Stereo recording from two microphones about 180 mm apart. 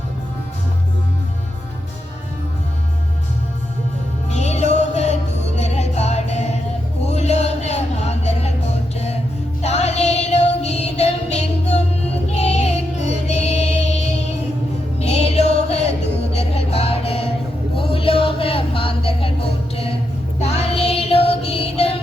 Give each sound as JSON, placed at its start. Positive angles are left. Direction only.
{"t": 4.3, "sound": "music", "side_deg": 40}
{"t": 17.7, "sound": "a sound", "side_deg": 30}
{"t": 20.4, "sound": "music", "side_deg": 35}